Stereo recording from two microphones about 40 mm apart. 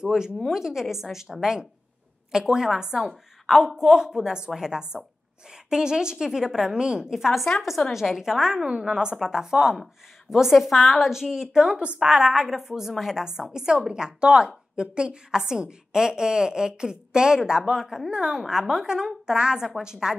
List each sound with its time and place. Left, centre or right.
0.0 s a woman's voice: centre
3.1 s a woman's voice: centre
11.1 s a woman's voice: centre
12.4 s a woman's voice: centre